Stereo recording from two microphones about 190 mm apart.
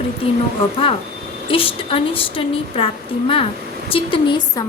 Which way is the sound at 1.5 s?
30° left (ahead or behind).